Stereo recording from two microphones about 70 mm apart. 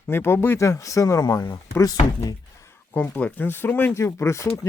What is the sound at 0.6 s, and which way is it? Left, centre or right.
Speech, left.